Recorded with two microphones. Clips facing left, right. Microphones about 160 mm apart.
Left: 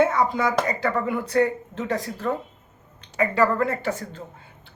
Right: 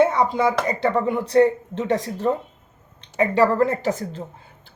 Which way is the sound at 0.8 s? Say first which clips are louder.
Right 4 dB; 30° right (ahead or behind).